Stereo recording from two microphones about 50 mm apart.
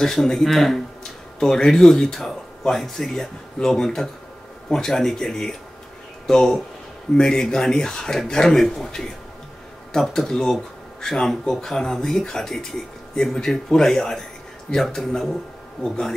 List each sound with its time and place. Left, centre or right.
0.0 s speech: centre